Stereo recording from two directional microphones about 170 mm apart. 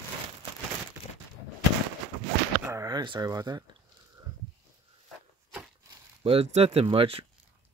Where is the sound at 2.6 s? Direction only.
20° right (ahead or behind).